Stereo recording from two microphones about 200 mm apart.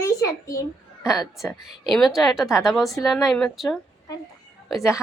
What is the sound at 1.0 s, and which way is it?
A woman's voice, centre (ahead or behind).